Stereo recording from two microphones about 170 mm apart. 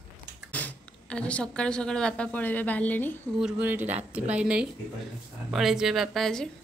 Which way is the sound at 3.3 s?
5° right (ahead or behind).